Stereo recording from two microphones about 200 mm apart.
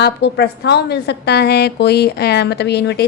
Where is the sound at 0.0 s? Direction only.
55° left (ahead or behind).